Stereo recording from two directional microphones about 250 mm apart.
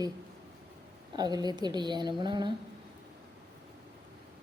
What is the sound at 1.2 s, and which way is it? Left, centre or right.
Speech, centre.